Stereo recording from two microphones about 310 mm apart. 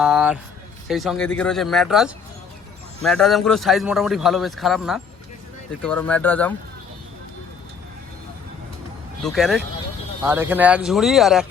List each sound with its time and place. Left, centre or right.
0.0 s a sound: centre
0.9 s speech: centre
9.2 s speech: centre